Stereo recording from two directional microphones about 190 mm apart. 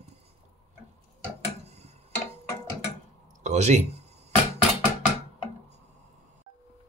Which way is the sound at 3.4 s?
35° right (ahead or behind).